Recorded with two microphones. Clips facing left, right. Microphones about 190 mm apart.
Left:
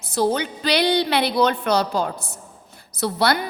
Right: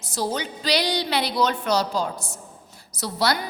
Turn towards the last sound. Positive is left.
turn(degrees=55)  # may be behind; listen again after turning